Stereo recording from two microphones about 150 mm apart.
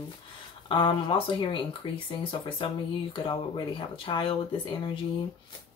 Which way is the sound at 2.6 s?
30° left (ahead or behind).